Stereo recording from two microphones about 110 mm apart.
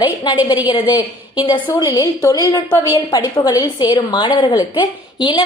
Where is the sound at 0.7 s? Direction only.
45° left (ahead or behind).